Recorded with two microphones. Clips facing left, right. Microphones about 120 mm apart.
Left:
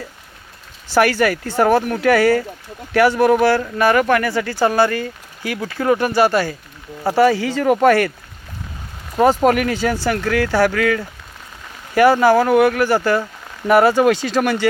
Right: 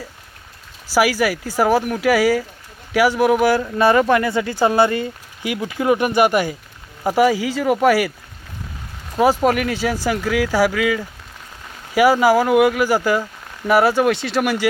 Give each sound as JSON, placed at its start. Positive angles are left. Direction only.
{"t": 0.9, "sound": "speech", "side_deg": -10}
{"t": 3.8, "sound": "speech", "side_deg": -25}
{"t": 9.1, "sound": "speech", "side_deg": 0}